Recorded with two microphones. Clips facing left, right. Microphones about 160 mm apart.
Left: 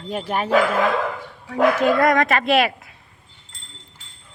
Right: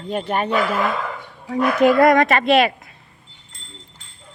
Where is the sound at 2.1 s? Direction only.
Centre (ahead or behind).